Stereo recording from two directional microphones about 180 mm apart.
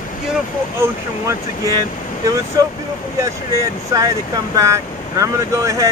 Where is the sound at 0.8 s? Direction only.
15° right (ahead or behind).